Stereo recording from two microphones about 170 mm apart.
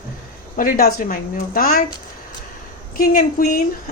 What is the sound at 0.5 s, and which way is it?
A woman's voice, 60° left (ahead or behind).